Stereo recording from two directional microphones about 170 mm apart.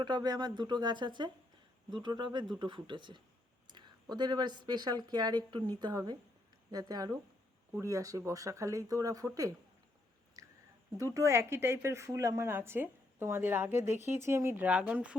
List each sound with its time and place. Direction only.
0.0 s speech: 25° right (ahead or behind)
3.7 s a sound: 25° right (ahead or behind)
4.1 s speech: 25° right (ahead or behind)
10.9 s speech: 20° right (ahead or behind)